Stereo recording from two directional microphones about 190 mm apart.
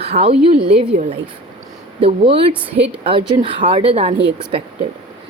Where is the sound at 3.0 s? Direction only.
30° right (ahead or behind).